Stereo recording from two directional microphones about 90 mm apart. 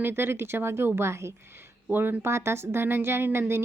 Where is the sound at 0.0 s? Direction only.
25° right (ahead or behind).